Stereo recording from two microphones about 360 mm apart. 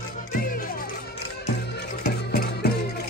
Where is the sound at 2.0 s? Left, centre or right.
Left.